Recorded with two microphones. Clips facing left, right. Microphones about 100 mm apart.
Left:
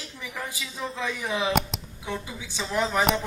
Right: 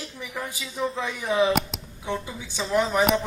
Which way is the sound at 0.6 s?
15° right (ahead or behind).